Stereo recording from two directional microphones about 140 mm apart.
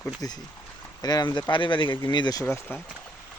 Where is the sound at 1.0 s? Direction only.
30° left (ahead or behind).